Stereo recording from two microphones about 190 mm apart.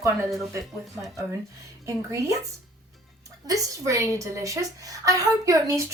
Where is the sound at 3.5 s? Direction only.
15° right (ahead or behind).